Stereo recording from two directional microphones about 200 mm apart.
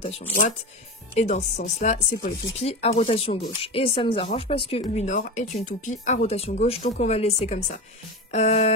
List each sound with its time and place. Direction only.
1.1 s speech: 40° left (ahead or behind)